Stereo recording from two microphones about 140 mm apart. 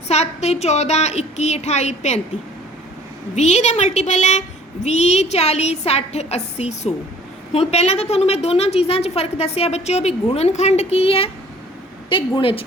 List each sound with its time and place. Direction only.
0.1 s speech: 50° left (ahead or behind)
3.3 s a woman's voice: 55° left (ahead or behind); by 12.6 s 40° left (ahead or behind)